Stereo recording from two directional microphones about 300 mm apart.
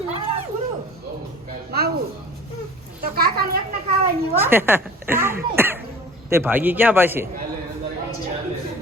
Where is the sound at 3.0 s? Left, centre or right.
Right.